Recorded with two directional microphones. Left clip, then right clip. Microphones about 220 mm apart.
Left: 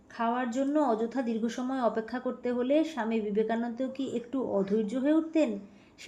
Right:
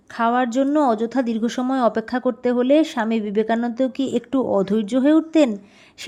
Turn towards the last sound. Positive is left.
turn(degrees=-50)  # may be behind; listen again after turning